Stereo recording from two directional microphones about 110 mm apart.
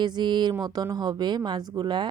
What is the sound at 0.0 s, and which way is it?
Speech, 40° right (ahead or behind).